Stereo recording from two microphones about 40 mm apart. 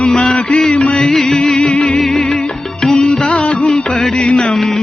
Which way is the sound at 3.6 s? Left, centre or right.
Left.